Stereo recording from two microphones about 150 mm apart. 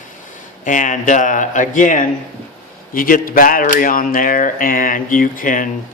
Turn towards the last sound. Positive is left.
turn(degrees=65)  # may be behind; listen again after turning